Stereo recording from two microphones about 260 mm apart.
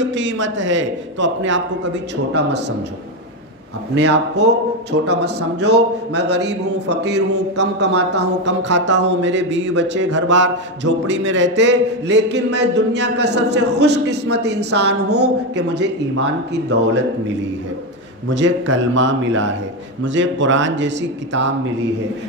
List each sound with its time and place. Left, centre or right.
0.0 s a man's voice: right
3.9 s a man's voice: right
18.3 s a man's voice: right